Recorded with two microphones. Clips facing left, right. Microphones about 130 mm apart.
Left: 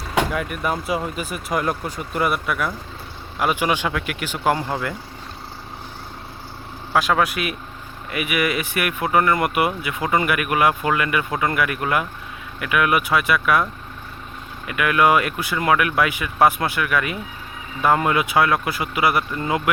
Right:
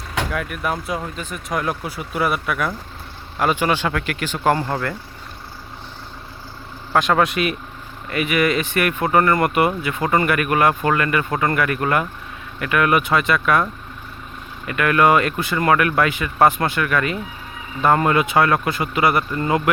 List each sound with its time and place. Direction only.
0.3 s speech: centre (ahead or behind)
6.9 s speech: 5° left (ahead or behind)
14.7 s speech: 5° left (ahead or behind)